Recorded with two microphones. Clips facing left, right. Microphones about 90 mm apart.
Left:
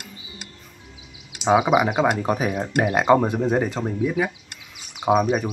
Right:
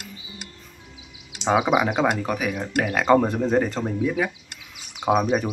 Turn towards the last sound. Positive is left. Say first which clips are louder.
# left 1 dB
turn(degrees=0)  # may be behind; listen again after turning